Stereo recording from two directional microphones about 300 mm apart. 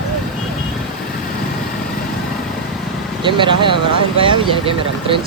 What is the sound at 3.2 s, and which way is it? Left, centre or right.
Speech, centre.